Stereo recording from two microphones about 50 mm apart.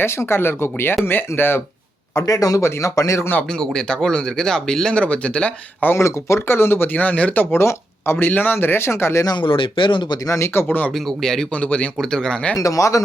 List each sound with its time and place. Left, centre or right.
0.0 s speech: left
2.1 s speech: left
3.6 s speech: centre
5.9 s speech: left
6.9 s speech: left
7.5 s speech: left
8.3 s speech: left
8.5 s speech: left
10.2 s speech: left
10.7 s speech: left
10.9 s speech: centre
11.5 s speech: left
11.9 s speech: centre
12.6 s speech: left